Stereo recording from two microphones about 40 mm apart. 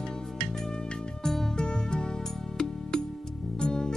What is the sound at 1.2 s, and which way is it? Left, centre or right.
Music, centre.